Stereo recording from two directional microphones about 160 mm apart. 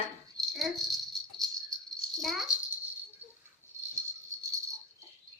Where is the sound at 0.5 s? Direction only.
Centre (ahead or behind).